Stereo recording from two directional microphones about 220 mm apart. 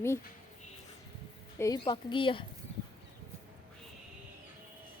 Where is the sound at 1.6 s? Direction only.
20° left (ahead or behind).